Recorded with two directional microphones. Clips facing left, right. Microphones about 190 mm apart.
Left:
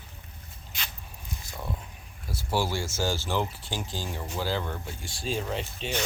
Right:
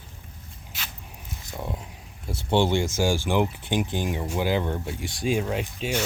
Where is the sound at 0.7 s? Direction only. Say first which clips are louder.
Even; 5° right (ahead or behind).